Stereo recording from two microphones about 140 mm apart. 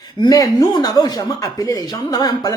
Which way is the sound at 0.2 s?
25° left (ahead or behind).